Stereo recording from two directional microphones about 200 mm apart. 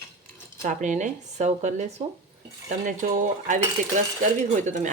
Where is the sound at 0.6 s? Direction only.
40° right (ahead or behind).